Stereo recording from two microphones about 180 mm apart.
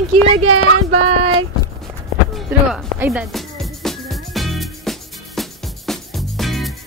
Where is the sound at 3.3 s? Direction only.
Centre (ahead or behind).